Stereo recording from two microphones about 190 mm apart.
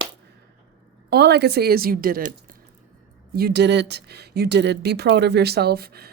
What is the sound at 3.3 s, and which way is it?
Speech, 60° right (ahead or behind).